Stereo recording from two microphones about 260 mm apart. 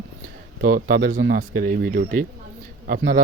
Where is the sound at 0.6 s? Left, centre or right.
Right.